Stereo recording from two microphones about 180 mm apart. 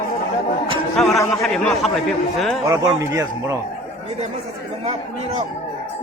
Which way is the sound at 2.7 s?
20° right (ahead or behind).